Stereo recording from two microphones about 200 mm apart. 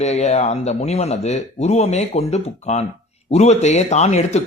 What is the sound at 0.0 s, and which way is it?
Speech, 35° left (ahead or behind).